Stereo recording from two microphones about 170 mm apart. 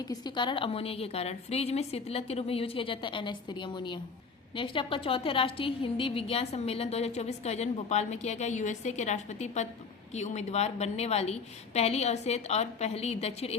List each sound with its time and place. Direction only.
0.1 s a woman's voice: 25° left (ahead or behind)